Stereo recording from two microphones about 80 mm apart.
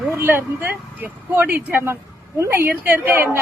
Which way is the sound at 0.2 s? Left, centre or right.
Right.